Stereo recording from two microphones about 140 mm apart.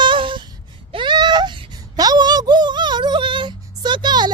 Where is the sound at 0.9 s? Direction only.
35° right (ahead or behind).